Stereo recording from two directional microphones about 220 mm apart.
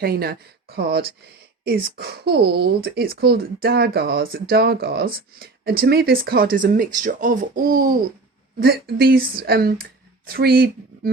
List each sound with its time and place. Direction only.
0.0 s speech: 45° right (ahead or behind)